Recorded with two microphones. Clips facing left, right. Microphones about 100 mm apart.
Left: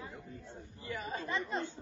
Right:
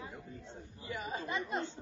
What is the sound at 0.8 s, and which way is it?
Chatter, 25° right (ahead or behind).